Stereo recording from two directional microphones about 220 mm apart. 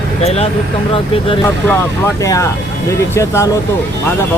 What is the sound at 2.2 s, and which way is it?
Speech, 15° left (ahead or behind).